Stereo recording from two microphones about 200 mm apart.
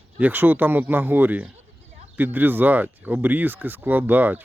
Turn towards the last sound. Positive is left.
turn(degrees=-10)  # may be behind; listen again after turning